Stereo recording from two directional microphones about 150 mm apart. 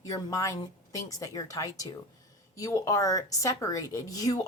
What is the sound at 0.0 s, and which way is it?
A woman's voice, 20° left (ahead or behind).